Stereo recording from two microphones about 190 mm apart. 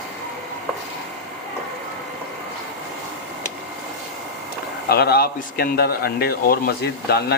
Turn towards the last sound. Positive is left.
turn(degrees=55)  # may be behind; listen again after turning